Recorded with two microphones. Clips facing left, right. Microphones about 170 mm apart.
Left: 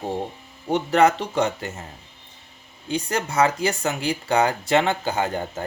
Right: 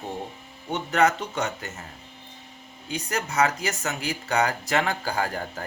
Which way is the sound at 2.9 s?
30° left (ahead or behind).